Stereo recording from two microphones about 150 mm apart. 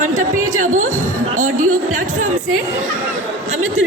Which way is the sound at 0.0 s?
60° right (ahead or behind).